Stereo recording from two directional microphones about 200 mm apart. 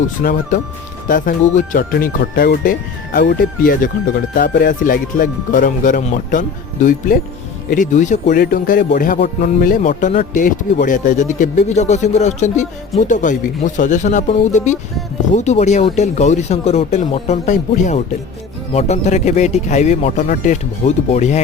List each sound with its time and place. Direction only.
0.2 s speech: 45° left (ahead or behind)
7.7 s speech: 40° left (ahead or behind)